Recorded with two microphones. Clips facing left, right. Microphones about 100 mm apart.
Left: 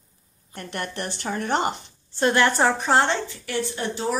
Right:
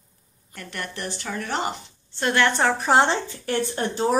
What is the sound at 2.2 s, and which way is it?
Speech, 15° left (ahead or behind).